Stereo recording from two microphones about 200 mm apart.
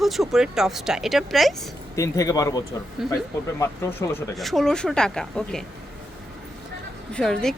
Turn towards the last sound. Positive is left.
turn(degrees=5)  # may be behind; listen again after turning